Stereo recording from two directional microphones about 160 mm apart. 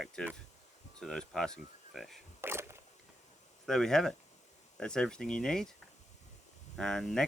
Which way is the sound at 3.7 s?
5° left (ahead or behind).